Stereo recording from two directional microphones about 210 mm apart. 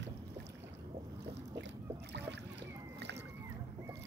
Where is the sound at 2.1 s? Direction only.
55° right (ahead or behind).